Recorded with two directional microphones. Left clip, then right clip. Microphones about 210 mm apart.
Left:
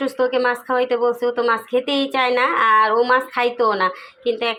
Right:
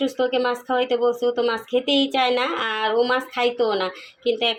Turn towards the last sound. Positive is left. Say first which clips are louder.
# even
turn(degrees=0)  # may be behind; listen again after turning